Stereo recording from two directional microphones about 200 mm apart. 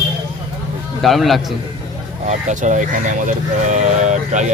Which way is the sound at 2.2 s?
40° right (ahead or behind).